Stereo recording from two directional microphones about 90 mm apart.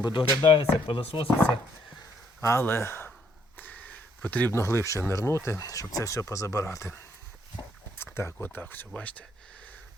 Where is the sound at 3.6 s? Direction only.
20° left (ahead or behind).